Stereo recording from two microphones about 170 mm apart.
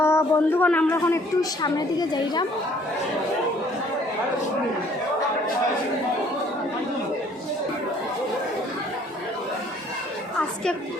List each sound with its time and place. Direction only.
0.0 s a woman's voice: 15° left (ahead or behind)